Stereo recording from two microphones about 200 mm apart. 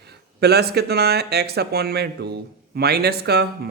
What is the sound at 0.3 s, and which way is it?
A man's voice, 55° right (ahead or behind).